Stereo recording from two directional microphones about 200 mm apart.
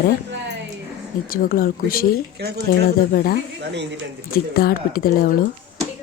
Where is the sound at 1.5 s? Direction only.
45° left (ahead or behind).